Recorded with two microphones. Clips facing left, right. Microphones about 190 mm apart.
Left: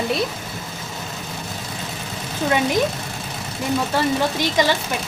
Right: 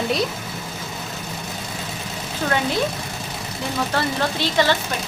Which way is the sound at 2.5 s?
15° left (ahead or behind).